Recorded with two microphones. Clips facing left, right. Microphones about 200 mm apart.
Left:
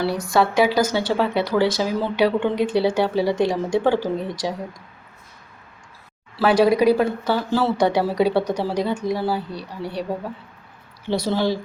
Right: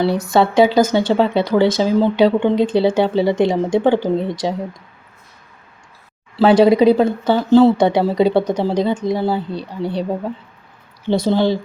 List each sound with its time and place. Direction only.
0.0 s speech: 25° right (ahead or behind)
6.3 s speech: 25° right (ahead or behind)
11.1 s speech: 20° right (ahead or behind)